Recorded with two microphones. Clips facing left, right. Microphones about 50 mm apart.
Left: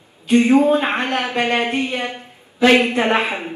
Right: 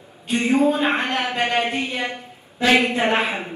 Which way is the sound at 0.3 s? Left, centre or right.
Left.